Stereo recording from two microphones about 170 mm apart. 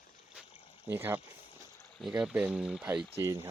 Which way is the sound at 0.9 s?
10° right (ahead or behind).